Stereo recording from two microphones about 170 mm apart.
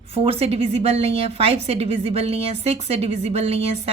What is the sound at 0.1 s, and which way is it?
A woman's voice, 35° right (ahead or behind).